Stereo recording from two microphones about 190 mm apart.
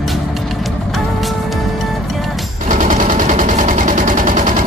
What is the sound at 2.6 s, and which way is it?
Gunshot, 45° right (ahead or behind).